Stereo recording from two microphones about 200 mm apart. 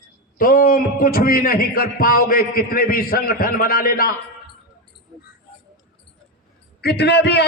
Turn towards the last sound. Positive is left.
turn(degrees=55)  # may be behind; listen again after turning